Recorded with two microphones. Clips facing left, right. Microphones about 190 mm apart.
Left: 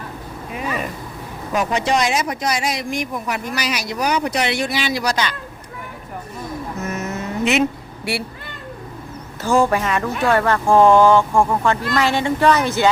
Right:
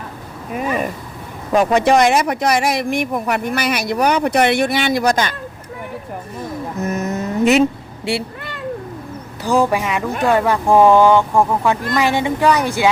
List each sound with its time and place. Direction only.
1.5 s speech: 55° right (ahead or behind)
6.7 s vehicle: 35° right (ahead or behind)
8.1 s speech: 20° right (ahead or behind)
9.6 s speech: 10° right (ahead or behind)